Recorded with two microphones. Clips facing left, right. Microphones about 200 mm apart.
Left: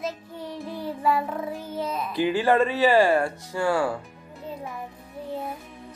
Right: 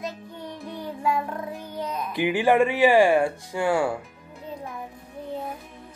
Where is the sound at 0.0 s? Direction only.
Centre (ahead or behind).